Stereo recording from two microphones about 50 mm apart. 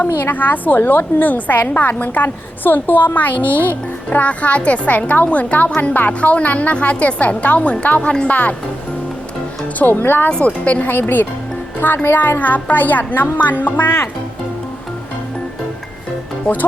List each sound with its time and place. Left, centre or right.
0.2 s a woman's voice: left
9.7 s speech: left
10.4 s a woman's voice: left
10.9 s a woman's voice: left